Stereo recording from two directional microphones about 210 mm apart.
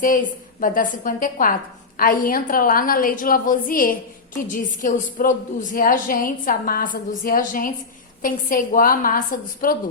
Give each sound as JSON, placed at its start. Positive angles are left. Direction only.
{"t": 0.0, "sound": "a woman's voice", "side_deg": 40}